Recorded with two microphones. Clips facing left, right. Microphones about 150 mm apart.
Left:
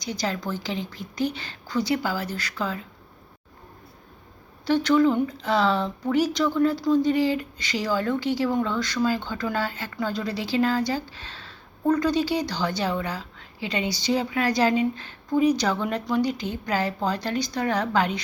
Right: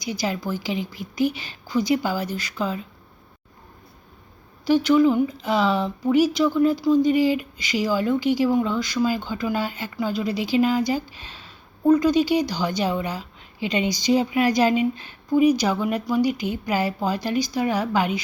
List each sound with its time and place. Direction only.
0.0 s speech: 10° right (ahead or behind)
4.6 s speech: 10° right (ahead or behind)